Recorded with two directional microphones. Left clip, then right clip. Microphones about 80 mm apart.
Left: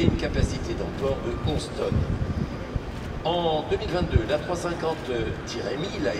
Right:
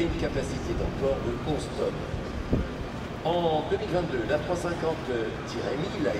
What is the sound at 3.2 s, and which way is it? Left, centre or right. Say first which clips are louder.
Speech: left 1 dB; left.